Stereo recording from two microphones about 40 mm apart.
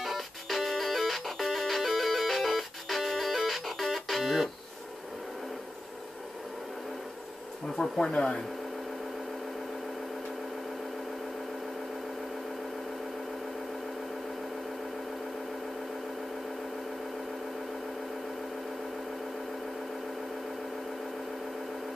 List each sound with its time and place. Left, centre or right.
0.0 s music: centre
7.7 s speech: centre
8.1 s speech: left